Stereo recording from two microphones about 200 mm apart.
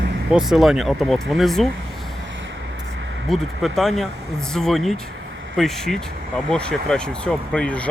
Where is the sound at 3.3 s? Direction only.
Centre (ahead or behind).